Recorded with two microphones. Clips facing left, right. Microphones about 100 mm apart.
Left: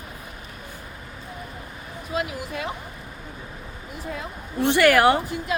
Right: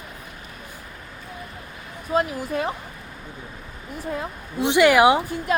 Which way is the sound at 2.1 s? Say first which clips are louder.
Right 6 dB; 35° right (ahead or behind).